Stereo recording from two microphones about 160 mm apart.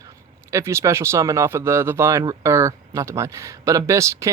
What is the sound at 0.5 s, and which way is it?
Speech, 15° right (ahead or behind).